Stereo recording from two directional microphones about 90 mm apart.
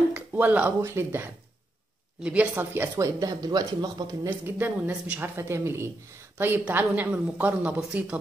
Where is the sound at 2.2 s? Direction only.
20° right (ahead or behind).